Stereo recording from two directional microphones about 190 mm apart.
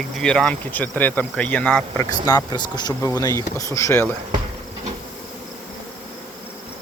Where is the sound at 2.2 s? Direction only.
20° left (ahead or behind).